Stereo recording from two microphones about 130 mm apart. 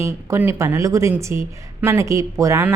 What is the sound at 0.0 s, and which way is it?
A woman's voice, 20° right (ahead or behind).